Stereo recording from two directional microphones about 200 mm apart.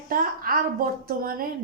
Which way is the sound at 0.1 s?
45° right (ahead or behind).